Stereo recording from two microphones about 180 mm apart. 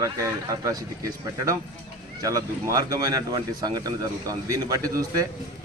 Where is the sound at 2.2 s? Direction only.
20° right (ahead or behind).